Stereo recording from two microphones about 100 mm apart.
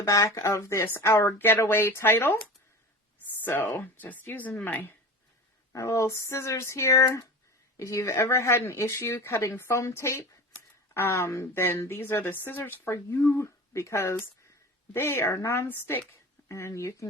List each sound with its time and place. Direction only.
0.0 s speech: 30° left (ahead or behind)
3.4 s speech: 20° left (ahead or behind)
5.7 s speech: 30° left (ahead or behind)